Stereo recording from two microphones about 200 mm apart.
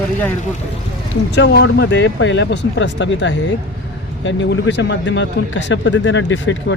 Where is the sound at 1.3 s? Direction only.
60° left (ahead or behind).